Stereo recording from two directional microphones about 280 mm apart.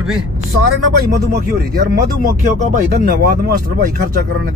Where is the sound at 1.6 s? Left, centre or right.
Right.